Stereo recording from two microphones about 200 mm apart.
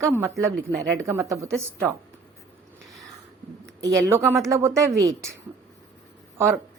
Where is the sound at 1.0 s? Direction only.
15° right (ahead or behind).